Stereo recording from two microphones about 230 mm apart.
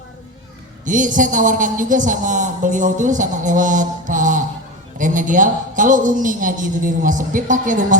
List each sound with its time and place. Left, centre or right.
0.9 s a man's voice: right